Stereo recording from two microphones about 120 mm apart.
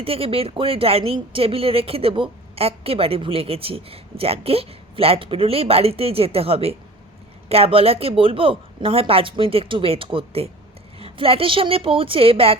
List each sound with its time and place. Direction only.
0.0 s speech: 50° right (ahead or behind)